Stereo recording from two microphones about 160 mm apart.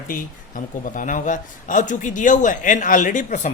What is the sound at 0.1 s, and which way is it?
A woman's voice, 55° left (ahead or behind).